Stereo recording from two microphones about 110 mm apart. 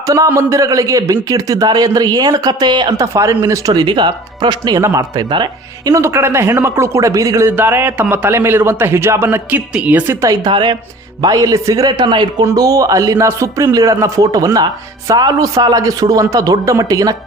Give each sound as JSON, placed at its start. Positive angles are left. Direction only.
{"t": 0.3, "sound": "a man's voice", "side_deg": -30}
{"t": 3.1, "sound": "a man's voice", "side_deg": -25}
{"t": 5.3, "sound": "speech", "side_deg": -45}
{"t": 5.9, "sound": "a man's voice", "side_deg": -25}
{"t": 7.5, "sound": "a man's voice", "side_deg": -20}
{"t": 10.2, "sound": "a man's voice", "side_deg": -35}
{"t": 10.5, "sound": "speech", "side_deg": -45}
{"t": 11.2, "sound": "a man's voice", "side_deg": -35}